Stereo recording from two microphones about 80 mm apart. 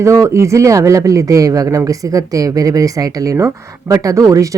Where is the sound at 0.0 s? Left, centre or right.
Right.